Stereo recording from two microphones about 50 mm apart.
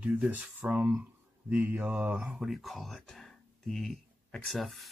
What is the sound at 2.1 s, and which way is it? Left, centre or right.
Speech, right.